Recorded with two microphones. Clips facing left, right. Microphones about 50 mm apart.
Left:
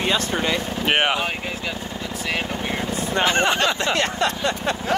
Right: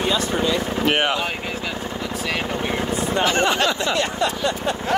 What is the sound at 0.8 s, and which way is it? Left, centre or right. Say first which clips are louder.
Speech: left 1 dB; left.